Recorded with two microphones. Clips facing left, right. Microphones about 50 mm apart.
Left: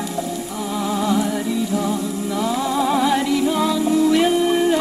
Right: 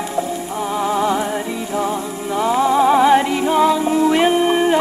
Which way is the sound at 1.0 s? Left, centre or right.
Right.